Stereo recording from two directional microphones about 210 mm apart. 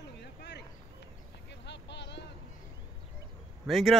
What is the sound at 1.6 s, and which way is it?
Vehicle, 55° left (ahead or behind).